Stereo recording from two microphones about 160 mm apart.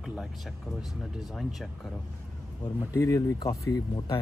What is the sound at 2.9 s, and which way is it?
Speech, 20° left (ahead or behind).